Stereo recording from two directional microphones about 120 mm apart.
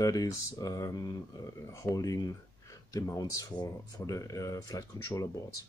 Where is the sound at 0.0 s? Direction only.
30° left (ahead or behind).